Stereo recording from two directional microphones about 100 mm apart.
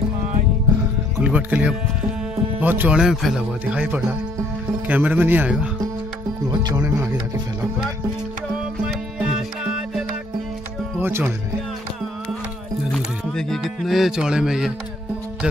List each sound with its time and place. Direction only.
1.2 s speech: 15° right (ahead or behind)
3.0 s speech: centre (ahead or behind)
3.6 s speech: 15° right (ahead or behind)
8.8 s music: 5° right (ahead or behind)
11.0 s music: 25° right (ahead or behind)
12.9 s speech: 5° left (ahead or behind)